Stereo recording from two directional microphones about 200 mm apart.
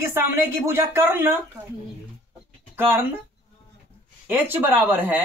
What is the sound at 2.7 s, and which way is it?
Speech, 10° right (ahead or behind).